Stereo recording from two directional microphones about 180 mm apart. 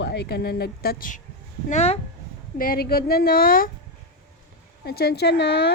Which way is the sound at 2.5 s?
55° left (ahead or behind).